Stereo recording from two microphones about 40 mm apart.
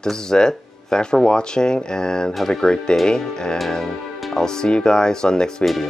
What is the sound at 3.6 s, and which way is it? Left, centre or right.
Speech, centre.